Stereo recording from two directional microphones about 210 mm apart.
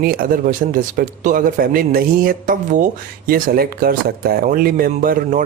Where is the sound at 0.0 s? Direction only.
45° right (ahead or behind).